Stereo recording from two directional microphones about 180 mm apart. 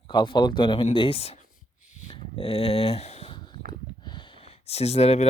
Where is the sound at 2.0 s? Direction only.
30° left (ahead or behind).